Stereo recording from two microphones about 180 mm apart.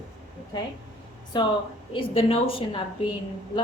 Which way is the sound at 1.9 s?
30° left (ahead or behind).